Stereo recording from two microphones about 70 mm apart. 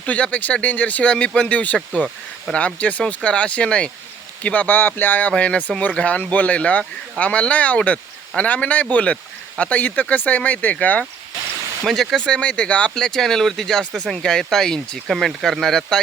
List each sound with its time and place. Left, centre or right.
0.0 s speech: centre
5.3 s speech: centre
11.9 s speech: centre